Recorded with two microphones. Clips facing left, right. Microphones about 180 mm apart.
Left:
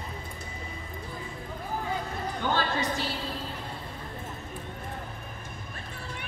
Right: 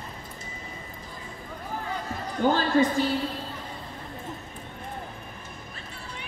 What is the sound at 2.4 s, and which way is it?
Speech, 40° right (ahead or behind).